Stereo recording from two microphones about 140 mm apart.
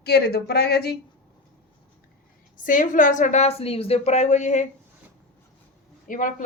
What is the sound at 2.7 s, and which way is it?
A woman's voice, 70° left (ahead or behind).